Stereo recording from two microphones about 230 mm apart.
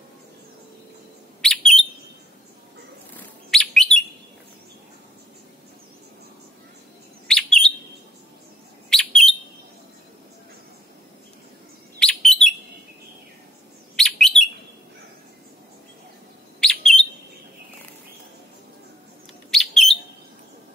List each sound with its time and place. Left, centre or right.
1.4 s bird: centre
3.2 s bird: centre
7.2 s chirp: centre
8.9 s bird: centre
12.0 s chirp: centre
13.9 s bird: centre
16.5 s bird: centre
19.5 s bird: centre